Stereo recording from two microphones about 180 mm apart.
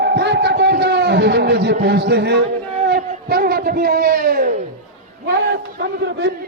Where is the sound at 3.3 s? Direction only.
60° right (ahead or behind).